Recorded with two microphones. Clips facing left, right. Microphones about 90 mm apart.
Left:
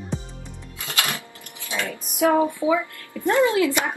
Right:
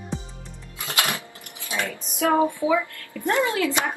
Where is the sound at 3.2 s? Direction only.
20° left (ahead or behind).